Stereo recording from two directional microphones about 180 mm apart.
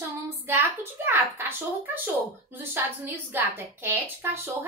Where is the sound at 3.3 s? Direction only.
10° right (ahead or behind).